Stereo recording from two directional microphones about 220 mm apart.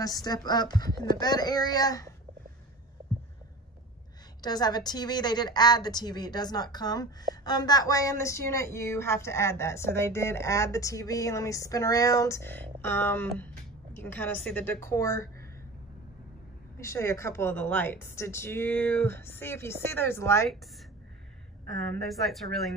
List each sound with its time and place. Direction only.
0.0 s a woman's voice: 15° left (ahead or behind)
4.4 s a woman's voice: 20° left (ahead or behind)
16.7 s a woman's voice: 10° left (ahead or behind)
21.7 s a woman's voice: centre (ahead or behind)